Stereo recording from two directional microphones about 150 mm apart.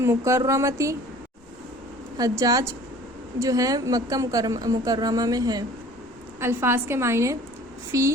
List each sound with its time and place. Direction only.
0.0 s a woman's voice: 20° right (ahead or behind)
2.1 s a woman's voice: 25° right (ahead or behind)